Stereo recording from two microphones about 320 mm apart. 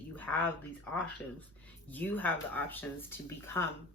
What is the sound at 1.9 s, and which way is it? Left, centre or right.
Speech, centre.